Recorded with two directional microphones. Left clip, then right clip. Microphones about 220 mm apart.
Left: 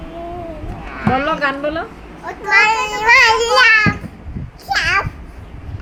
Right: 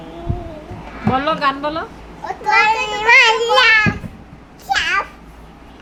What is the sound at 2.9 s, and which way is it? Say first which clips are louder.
Speech: even; 10° right (ahead or behind).